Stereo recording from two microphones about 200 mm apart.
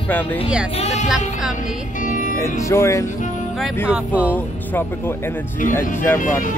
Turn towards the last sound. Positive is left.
turn(degrees=40)  # may be behind; listen again after turning